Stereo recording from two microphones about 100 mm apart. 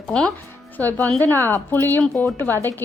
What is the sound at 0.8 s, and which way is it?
A woman's voice, 20° left (ahead or behind).